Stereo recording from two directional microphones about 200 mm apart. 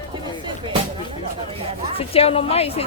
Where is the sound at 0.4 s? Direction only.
25° right (ahead or behind).